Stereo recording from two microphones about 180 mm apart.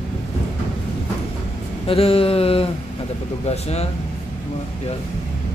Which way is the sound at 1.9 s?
30° left (ahead or behind).